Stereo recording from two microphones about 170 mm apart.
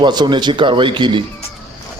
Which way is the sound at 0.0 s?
25° right (ahead or behind).